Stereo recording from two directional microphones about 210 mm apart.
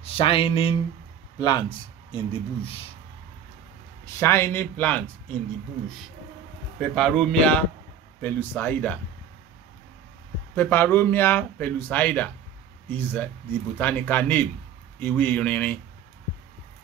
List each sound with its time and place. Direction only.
0.0 s speech: 25° left (ahead or behind)
4.0 s speech: 10° left (ahead or behind)
6.8 s a man's voice: 5° left (ahead or behind)
10.5 s speech: 10° left (ahead or behind)